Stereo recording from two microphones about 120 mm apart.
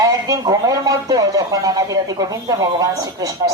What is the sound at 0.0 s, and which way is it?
Speech, 30° right (ahead or behind).